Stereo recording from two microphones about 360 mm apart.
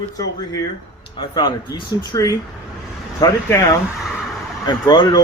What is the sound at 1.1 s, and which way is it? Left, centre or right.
Speech, centre.